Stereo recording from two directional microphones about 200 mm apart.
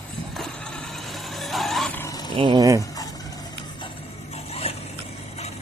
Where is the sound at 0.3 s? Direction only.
5° left (ahead or behind).